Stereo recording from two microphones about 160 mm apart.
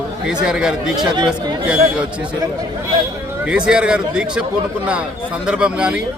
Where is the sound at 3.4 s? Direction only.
5° right (ahead or behind).